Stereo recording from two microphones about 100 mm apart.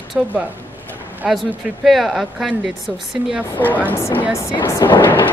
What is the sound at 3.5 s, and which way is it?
A woman's voice, 20° left (ahead or behind).